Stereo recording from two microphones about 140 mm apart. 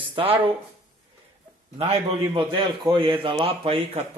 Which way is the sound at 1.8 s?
45° right (ahead or behind).